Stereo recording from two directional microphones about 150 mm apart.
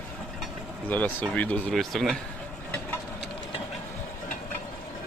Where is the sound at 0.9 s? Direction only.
10° left (ahead or behind).